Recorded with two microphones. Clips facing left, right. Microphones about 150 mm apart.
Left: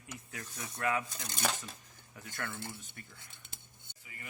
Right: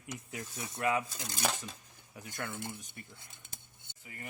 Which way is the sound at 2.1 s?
15° right (ahead or behind).